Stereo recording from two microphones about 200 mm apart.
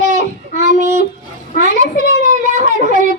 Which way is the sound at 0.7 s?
35° right (ahead or behind).